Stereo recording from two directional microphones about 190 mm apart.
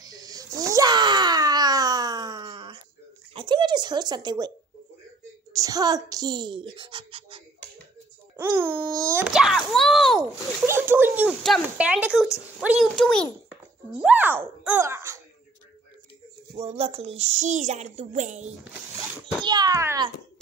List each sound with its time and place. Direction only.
0.0 s a sound: 20° right (ahead or behind)
5.5 s a child's voice: 20° right (ahead or behind)
8.4 s a child's voice: 10° right (ahead or behind)
10.6 s a child's voice: 10° right (ahead or behind); by 13.3 s 5° left (ahead or behind)
14.0 s speech: 10° right (ahead or behind)
14.6 s music: 10° right (ahead or behind)
16.5 s speech: 30° right (ahead or behind)
18.9 s a child's voice: 20° right (ahead or behind)